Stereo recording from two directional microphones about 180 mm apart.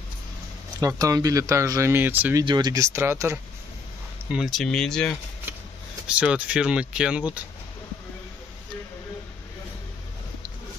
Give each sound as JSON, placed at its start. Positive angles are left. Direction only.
{"t": 0.7, "sound": "speech", "side_deg": -20}
{"t": 2.4, "sound": "speech", "side_deg": -25}
{"t": 4.3, "sound": "speech", "side_deg": 0}